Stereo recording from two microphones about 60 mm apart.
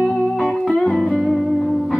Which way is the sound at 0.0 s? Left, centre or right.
Centre.